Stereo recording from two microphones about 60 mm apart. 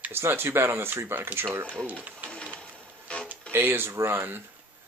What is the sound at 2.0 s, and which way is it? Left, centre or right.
Sewing machine, right.